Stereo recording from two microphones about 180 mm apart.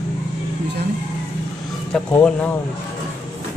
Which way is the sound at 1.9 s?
5° left (ahead or behind).